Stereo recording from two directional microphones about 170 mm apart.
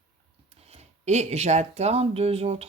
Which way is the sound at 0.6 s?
40° right (ahead or behind).